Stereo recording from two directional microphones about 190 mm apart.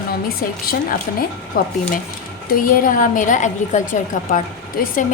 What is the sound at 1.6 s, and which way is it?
A woman's voice, 50° left (ahead or behind).